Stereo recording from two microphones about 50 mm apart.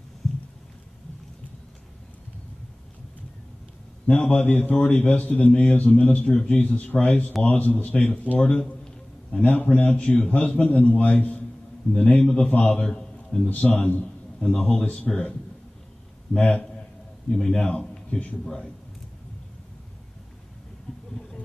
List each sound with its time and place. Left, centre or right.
4.1 s a man's voice: left
8.5 s a sound: centre
9.4 s a man's voice: left
12.8 s a sound: centre
13.5 s speech: left
14.4 s a man's voice: centre
16.3 s speech: left
17.3 s a man's voice: centre